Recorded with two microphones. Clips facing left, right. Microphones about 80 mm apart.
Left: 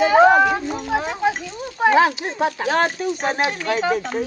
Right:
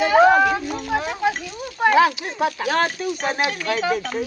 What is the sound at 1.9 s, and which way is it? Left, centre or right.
Speech, left.